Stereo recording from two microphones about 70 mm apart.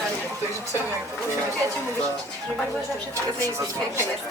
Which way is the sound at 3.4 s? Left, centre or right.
Right.